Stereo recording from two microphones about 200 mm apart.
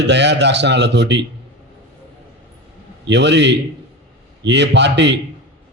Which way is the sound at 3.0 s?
60° right (ahead or behind).